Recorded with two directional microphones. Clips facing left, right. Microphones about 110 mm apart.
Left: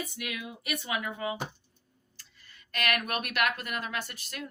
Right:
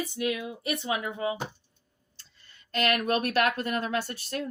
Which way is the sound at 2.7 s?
30° right (ahead or behind).